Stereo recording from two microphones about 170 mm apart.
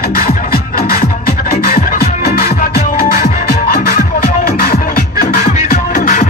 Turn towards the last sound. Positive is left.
turn(degrees=50)  # may be behind; listen again after turning